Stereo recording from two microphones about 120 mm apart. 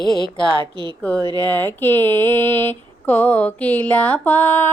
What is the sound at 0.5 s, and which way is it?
Speech, 45° right (ahead or behind).